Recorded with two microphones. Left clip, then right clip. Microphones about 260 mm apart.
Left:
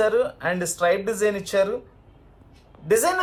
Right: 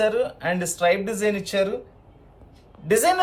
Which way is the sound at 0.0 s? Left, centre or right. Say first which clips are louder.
Left 1 dB; centre.